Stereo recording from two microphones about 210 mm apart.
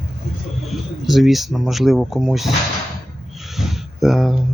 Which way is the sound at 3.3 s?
Centre (ahead or behind).